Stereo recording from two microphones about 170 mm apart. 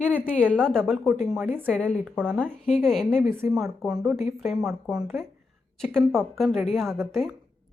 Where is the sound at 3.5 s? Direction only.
Centre (ahead or behind).